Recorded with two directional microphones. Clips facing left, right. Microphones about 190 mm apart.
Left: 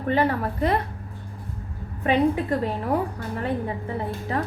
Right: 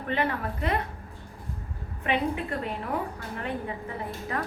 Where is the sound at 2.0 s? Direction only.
40° left (ahead or behind).